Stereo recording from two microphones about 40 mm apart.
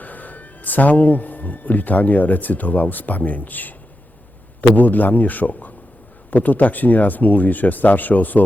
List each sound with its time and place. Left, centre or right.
0.0 s speech: left